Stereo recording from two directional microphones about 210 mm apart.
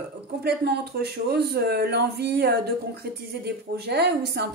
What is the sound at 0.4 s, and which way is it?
Speech, 50° right (ahead or behind).